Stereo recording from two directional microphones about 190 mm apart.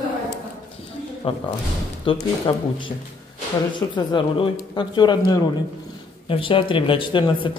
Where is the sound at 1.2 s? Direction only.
30° left (ahead or behind).